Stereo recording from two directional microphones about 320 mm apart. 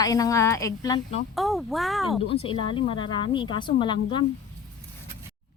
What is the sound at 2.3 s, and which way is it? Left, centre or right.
Speech, centre.